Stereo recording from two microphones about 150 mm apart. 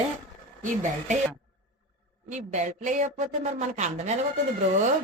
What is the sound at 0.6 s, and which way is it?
Speech, 55° right (ahead or behind).